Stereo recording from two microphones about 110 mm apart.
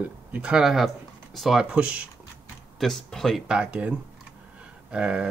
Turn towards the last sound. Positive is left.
turn(degrees=-10)  # may be behind; listen again after turning